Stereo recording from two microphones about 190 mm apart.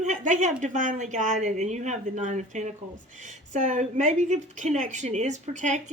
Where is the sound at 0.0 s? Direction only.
40° right (ahead or behind).